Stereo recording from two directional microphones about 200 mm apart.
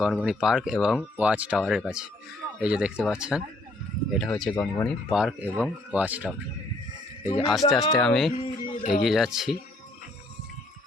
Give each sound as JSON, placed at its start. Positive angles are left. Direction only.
{"t": 0.0, "sound": "speech", "side_deg": 0}
{"t": 4.5, "sound": "speech", "side_deg": 15}
{"t": 5.0, "sound": "speech", "side_deg": -5}
{"t": 7.3, "sound": "speech", "side_deg": 0}
{"t": 8.3, "sound": "a sound", "side_deg": 30}
{"t": 9.0, "sound": "speech", "side_deg": 0}